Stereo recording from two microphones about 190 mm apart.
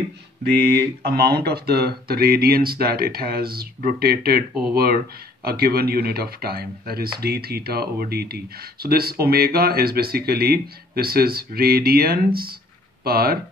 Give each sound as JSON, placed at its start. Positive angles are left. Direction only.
{"t": 1.0, "sound": "speech", "side_deg": -55}